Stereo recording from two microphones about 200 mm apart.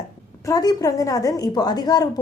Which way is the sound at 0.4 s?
20° left (ahead or behind).